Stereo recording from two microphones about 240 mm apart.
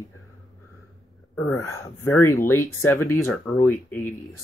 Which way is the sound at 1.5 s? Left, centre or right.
Centre.